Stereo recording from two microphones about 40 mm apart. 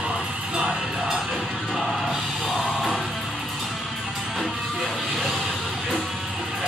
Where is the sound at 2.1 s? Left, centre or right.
Centre.